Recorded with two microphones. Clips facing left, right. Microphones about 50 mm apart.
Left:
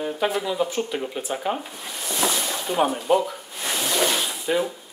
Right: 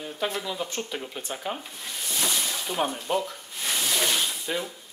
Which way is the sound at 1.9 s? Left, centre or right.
Centre.